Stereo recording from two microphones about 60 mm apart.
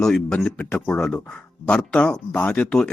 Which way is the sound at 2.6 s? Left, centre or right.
Centre.